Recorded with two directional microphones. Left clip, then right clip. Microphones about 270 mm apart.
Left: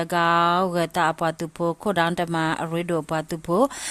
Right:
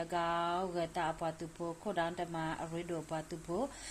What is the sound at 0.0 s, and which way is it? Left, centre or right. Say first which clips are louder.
Speech: left 15 dB; left.